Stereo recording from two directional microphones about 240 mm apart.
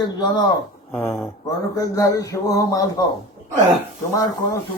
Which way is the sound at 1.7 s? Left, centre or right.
Centre.